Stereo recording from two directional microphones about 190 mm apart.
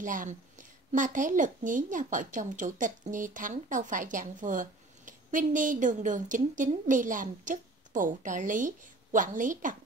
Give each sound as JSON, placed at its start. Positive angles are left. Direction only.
{"t": 0.0, "sound": "a woman's voice", "side_deg": -45}